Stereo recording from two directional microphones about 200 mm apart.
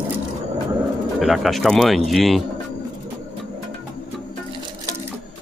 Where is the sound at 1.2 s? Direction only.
Centre (ahead or behind).